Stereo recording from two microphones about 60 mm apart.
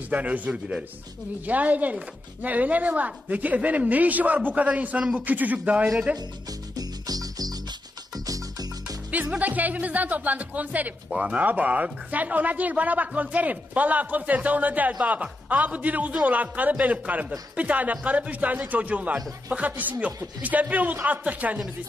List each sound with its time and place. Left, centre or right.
0.1 s speech: right
6.7 s music: right
9.4 s speech: right